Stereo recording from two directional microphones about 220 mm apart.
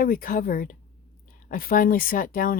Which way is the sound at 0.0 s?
40° left (ahead or behind).